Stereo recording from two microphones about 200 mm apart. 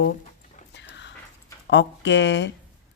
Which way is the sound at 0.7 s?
60° left (ahead or behind).